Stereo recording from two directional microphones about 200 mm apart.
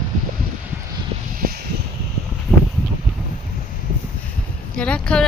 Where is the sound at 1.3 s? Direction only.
50° right (ahead or behind).